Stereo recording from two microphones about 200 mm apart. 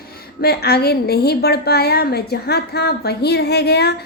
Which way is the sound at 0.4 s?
50° left (ahead or behind).